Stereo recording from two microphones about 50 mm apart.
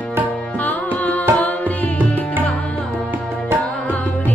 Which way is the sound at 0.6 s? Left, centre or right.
Left.